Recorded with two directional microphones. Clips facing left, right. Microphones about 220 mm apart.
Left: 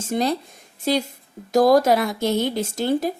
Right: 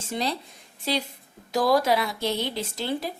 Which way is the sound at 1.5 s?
45° left (ahead or behind).